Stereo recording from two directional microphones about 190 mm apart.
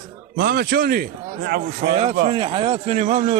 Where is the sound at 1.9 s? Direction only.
30° right (ahead or behind).